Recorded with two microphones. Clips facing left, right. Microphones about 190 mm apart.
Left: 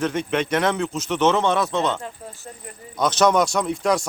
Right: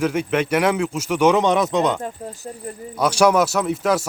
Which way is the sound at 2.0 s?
40° right (ahead or behind).